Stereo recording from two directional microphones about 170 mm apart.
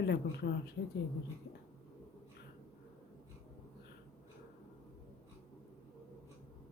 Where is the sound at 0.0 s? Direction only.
75° left (ahead or behind).